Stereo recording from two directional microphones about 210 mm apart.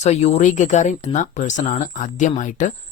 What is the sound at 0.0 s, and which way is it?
Speech, 30° left (ahead or behind).